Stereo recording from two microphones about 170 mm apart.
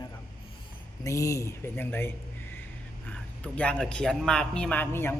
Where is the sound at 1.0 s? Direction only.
20° left (ahead or behind).